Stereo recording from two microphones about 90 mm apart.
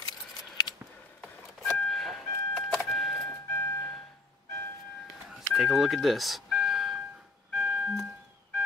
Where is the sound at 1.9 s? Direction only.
Centre (ahead or behind).